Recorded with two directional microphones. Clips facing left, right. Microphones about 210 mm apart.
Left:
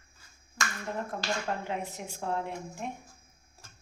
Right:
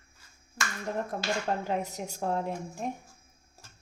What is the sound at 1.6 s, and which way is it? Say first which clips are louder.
A woman's voice: right 4 dB; 40° right (ahead or behind).